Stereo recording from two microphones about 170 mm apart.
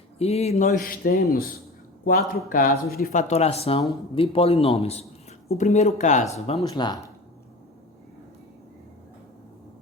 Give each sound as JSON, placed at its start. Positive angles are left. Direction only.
{"t": 0.2, "sound": "a man's voice", "side_deg": 40}